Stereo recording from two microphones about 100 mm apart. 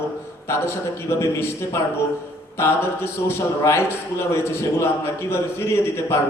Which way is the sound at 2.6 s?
25° left (ahead or behind).